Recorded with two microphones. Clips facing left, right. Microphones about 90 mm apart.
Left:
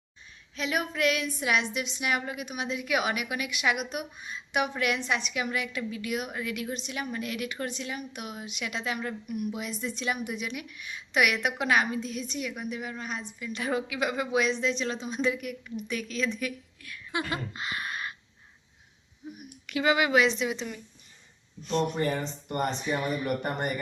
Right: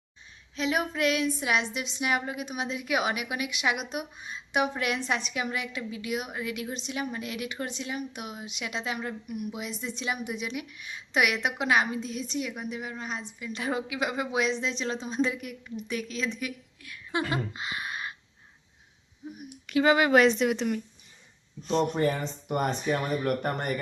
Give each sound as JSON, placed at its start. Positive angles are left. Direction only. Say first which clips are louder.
{"t": 0.5, "sound": "a woman's voice", "louder": "right 2 dB", "side_deg": -25}
{"t": 19.3, "sound": "speech", "louder": "right 5 dB", "side_deg": -25}
{"t": 21.6, "sound": "speech", "louder": "right 2 dB", "side_deg": -35}
{"t": 21.9, "sound": "speech", "louder": "right 2 dB", "side_deg": 0}